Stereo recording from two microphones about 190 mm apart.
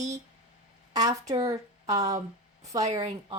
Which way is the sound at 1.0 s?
20° right (ahead or behind).